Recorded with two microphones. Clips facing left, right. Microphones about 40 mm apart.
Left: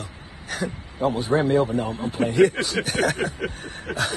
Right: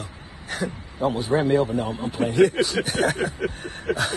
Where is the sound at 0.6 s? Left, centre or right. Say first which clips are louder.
Even; right.